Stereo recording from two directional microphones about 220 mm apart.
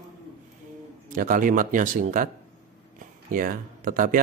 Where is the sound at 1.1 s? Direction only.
40° right (ahead or behind).